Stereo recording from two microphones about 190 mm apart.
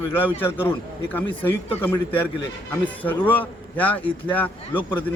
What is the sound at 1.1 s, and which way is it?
A man's voice, 10° left (ahead or behind).